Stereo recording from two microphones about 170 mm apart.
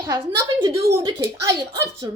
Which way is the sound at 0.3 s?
20° right (ahead or behind).